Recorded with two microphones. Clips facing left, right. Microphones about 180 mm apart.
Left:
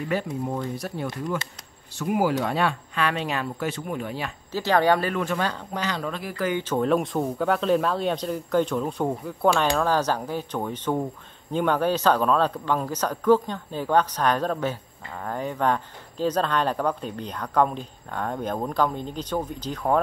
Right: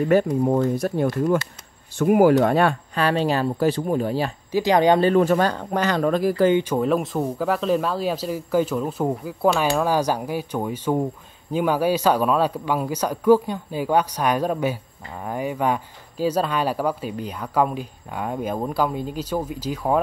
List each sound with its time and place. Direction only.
0.5 s speech: 45° right (ahead or behind)
4.5 s speech: 15° right (ahead or behind)
5.1 s speech: 40° right (ahead or behind)
6.6 s speech: 5° right (ahead or behind)